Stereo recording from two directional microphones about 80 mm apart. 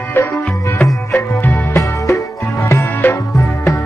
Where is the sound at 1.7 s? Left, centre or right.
Left.